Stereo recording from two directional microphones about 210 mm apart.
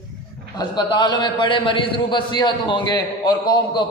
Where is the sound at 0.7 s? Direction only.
20° left (ahead or behind).